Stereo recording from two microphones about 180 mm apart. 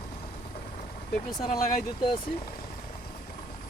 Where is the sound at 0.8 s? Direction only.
45° left (ahead or behind).